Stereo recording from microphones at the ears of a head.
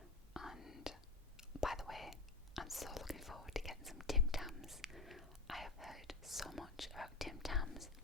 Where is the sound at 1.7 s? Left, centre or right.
Centre.